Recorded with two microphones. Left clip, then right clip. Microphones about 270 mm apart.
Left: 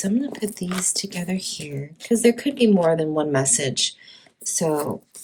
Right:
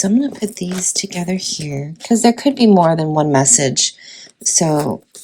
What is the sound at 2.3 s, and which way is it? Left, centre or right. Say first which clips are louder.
Speech: right 6 dB; right.